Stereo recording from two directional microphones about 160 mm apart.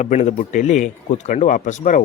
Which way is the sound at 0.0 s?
45° left (ahead or behind).